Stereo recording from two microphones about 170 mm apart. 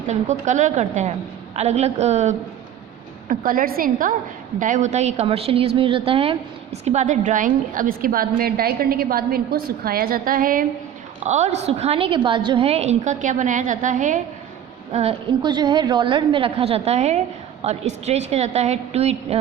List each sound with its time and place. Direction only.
0.1 s a woman's voice: 45° right (ahead or behind)
3.2 s a woman's voice: 55° right (ahead or behind)
11.3 s a woman's voice: 40° right (ahead or behind)
14.9 s a woman's voice: 30° right (ahead or behind)